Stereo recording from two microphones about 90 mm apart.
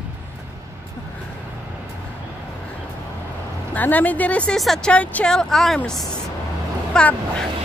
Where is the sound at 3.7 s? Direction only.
20° left (ahead or behind).